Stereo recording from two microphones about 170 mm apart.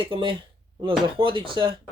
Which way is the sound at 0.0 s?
30° right (ahead or behind).